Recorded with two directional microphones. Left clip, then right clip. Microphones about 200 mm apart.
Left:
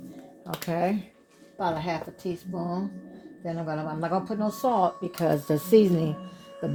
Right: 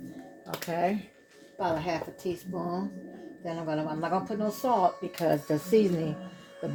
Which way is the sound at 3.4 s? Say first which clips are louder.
Left 1 dB; 40° left (ahead or behind).